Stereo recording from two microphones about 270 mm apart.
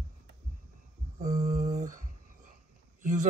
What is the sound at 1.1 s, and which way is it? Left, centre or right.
Mantra, right.